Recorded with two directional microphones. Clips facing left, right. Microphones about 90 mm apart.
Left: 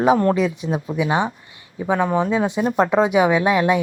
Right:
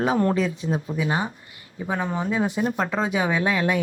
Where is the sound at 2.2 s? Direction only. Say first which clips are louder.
Left 4 dB; 25° left (ahead or behind).